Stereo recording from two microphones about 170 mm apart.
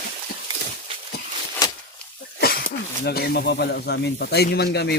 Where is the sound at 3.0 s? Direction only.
70° left (ahead or behind).